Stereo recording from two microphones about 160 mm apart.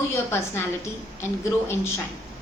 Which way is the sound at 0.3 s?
15° left (ahead or behind).